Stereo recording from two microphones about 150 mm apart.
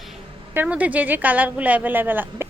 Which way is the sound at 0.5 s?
10° right (ahead or behind).